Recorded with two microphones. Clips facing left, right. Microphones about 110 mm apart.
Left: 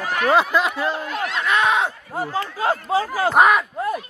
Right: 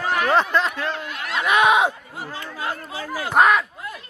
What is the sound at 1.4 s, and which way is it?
Speech, 15° right (ahead or behind).